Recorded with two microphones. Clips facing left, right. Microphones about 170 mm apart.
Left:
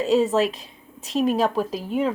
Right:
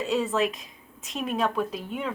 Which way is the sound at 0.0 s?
35° left (ahead or behind).